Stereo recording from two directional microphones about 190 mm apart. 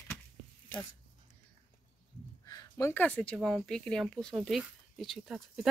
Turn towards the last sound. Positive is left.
turn(degrees=0)  # may be behind; listen again after turning